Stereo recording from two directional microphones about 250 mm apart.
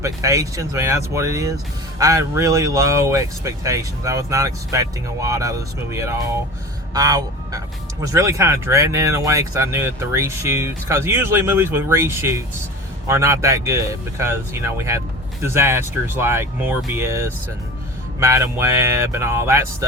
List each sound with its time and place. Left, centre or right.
0.0 s speech: centre